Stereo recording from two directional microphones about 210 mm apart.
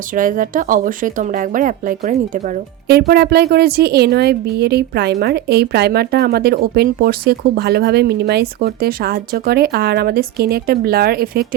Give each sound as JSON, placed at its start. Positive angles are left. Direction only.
{"t": 0.1, "sound": "a woman's voice", "side_deg": -40}